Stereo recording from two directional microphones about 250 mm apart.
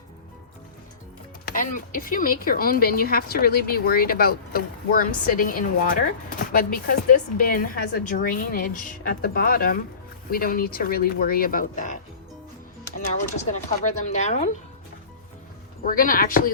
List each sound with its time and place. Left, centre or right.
1.5 s speech: left
13.5 s speech: left
15.8 s speech: left